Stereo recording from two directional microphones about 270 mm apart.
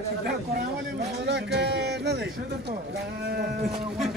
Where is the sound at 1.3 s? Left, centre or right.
Right.